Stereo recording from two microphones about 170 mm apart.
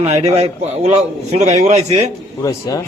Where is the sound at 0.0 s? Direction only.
40° right (ahead or behind).